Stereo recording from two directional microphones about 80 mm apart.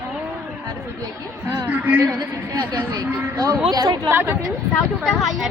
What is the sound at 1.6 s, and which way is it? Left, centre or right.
Speech, right.